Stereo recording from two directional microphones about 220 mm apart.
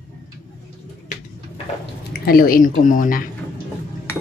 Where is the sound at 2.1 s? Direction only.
45° left (ahead or behind).